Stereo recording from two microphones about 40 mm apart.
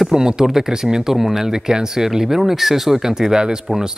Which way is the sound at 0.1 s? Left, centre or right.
Centre.